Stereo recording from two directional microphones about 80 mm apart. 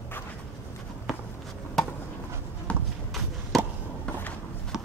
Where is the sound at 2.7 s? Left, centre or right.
Centre.